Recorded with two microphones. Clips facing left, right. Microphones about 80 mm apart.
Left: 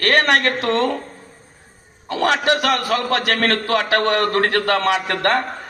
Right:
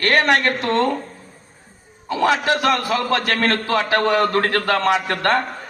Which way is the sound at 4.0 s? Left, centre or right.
Left.